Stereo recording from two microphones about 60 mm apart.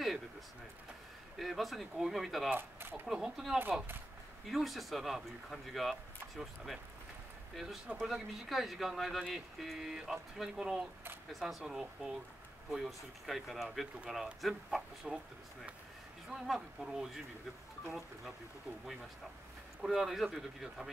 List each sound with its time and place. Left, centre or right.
1.4 s speech: centre
2.5 s speech: right
3.1 s speech: centre
16.3 s speech: centre
19.8 s speech: centre